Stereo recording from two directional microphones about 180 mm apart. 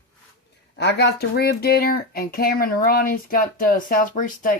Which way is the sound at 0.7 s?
65° left (ahead or behind).